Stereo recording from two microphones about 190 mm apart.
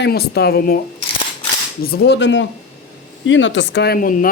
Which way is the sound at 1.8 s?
55° left (ahead or behind).